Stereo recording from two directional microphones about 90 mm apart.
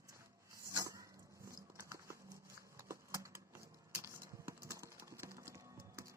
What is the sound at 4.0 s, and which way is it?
Music, 30° right (ahead or behind).